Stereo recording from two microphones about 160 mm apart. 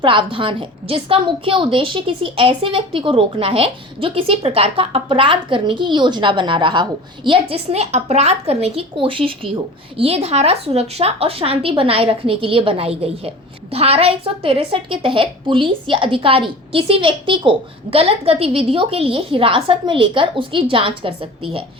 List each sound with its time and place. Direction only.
0.0 s a woman's voice: 30° right (ahead or behind)